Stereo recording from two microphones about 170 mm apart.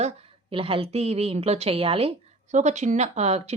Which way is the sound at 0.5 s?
35° right (ahead or behind).